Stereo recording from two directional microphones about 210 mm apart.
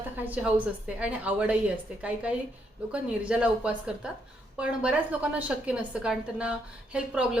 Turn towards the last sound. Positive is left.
turn(degrees=-5)  # may be behind; listen again after turning